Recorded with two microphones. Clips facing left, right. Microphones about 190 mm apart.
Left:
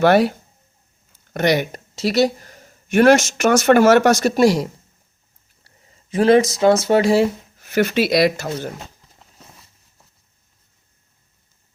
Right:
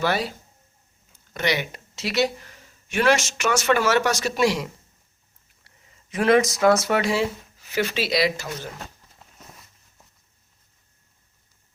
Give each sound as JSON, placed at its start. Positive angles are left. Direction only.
{"t": 0.0, "sound": "speech", "side_deg": 60}
{"t": 1.3, "sound": "speech", "side_deg": 45}
{"t": 7.2, "sound": "speech", "side_deg": 45}